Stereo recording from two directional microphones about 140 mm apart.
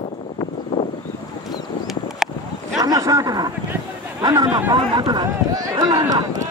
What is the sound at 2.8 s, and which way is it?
A man's voice, 25° right (ahead or behind).